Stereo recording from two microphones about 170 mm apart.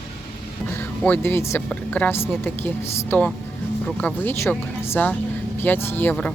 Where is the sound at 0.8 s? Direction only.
10° left (ahead or behind).